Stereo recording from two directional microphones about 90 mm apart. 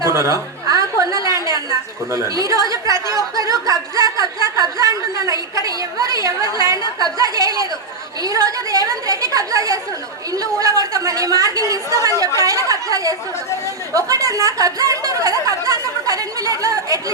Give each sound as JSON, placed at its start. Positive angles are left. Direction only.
{"t": 0.0, "sound": "chuckle", "side_deg": -35}
{"t": 2.0, "sound": "a woman's voice", "side_deg": -35}
{"t": 4.4, "sound": "a sound", "side_deg": -40}
{"t": 5.6, "sound": "a woman's voice", "side_deg": -40}
{"t": 12.4, "sound": "chatter", "side_deg": -35}
{"t": 13.9, "sound": "a sound", "side_deg": -35}